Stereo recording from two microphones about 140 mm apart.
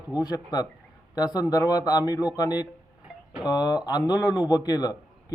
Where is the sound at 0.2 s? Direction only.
30° left (ahead or behind).